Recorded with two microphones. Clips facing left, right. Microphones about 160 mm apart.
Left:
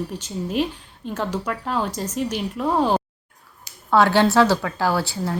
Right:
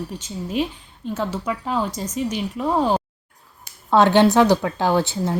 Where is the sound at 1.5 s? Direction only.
5° right (ahead or behind).